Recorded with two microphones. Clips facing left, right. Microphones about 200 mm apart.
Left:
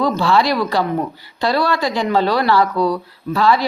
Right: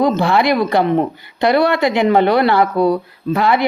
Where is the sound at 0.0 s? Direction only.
20° right (ahead or behind).